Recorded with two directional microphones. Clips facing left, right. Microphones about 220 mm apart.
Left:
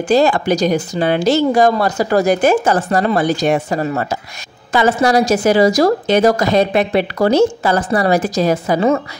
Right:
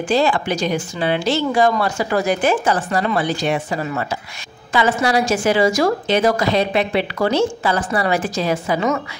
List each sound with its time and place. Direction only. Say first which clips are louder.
0.1 s a woman's voice: left 5 dB; 40° left (ahead or behind)